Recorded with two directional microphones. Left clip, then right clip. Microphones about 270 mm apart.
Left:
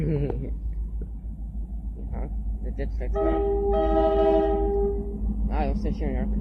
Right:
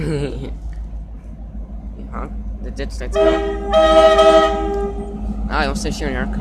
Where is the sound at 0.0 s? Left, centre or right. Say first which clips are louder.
Right 6 dB; centre.